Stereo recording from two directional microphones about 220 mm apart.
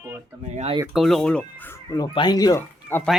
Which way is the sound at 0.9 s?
Centre (ahead or behind).